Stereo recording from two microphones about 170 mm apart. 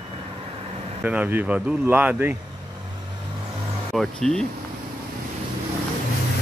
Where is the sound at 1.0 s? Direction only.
10° right (ahead or behind).